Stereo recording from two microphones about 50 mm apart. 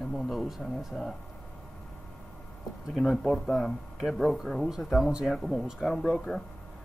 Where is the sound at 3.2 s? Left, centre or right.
Centre.